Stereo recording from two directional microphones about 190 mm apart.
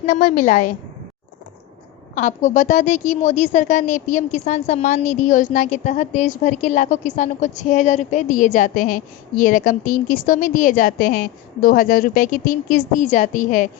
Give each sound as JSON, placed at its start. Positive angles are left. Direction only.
{"t": 0.0, "sound": "a woman's voice", "side_deg": 45}
{"t": 2.1, "sound": "a woman's voice", "side_deg": 40}